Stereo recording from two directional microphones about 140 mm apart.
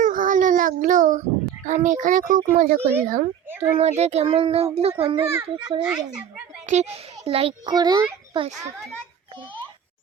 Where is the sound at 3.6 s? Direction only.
50° right (ahead or behind).